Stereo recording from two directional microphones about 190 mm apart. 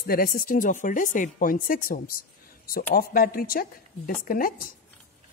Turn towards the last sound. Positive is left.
turn(degrees=50)  # may be behind; listen again after turning